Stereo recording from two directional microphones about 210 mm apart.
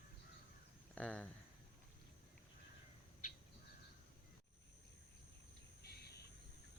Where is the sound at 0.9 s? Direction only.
5° left (ahead or behind).